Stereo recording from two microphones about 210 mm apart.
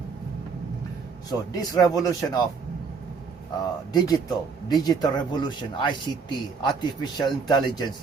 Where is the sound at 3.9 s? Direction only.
20° left (ahead or behind).